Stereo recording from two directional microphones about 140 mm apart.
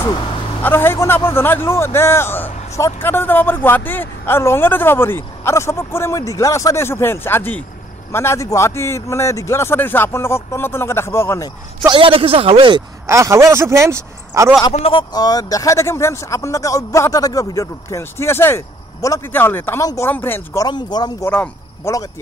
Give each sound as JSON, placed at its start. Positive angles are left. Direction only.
{"t": 0.6, "sound": "a man's voice", "side_deg": 15}
{"t": 11.8, "sound": "speech", "side_deg": -35}
{"t": 13.0, "sound": "speech", "side_deg": -20}
{"t": 14.7, "sound": "a man's voice", "side_deg": 40}
{"t": 20.6, "sound": "speech", "side_deg": 30}
{"t": 21.3, "sound": "a man's voice", "side_deg": 10}